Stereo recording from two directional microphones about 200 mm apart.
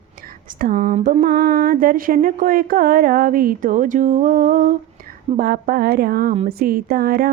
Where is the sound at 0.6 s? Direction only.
45° right (ahead or behind).